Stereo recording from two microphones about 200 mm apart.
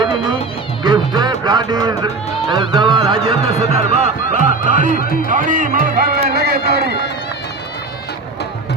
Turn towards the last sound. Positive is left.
turn(degrees=-50)  # may be behind; listen again after turning